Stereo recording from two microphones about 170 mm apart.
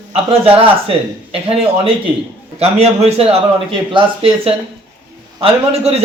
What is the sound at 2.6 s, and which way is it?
A man's voice, 40° right (ahead or behind).